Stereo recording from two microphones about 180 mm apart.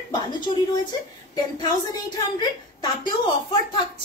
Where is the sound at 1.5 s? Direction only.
25° left (ahead or behind).